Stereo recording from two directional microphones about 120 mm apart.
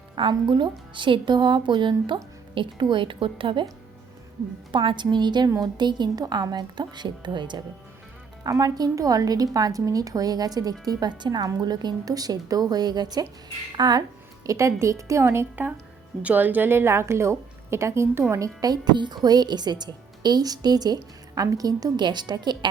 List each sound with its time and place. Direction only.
0.2 s a woman's voice: 45° right (ahead or behind)
4.7 s a woman's voice: 45° right (ahead or behind)